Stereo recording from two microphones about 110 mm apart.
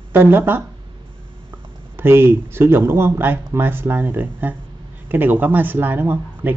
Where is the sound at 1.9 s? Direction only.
20° right (ahead or behind).